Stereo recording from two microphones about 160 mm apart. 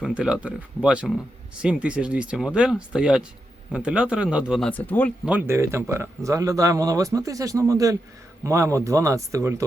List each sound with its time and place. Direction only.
0.0 s speech: 5° right (ahead or behind)
4.7 s speech: 10° left (ahead or behind)
5.2 s speech: 10° right (ahead or behind)